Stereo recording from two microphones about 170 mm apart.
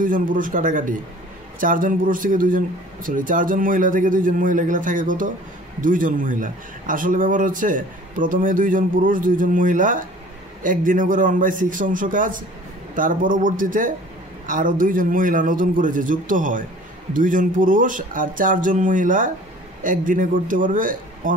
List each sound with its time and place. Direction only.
0.0 s a man's voice: 50° right (ahead or behind)